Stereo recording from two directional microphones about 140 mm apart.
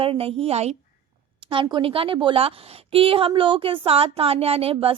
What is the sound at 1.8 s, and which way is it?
A woman's voice, 40° right (ahead or behind).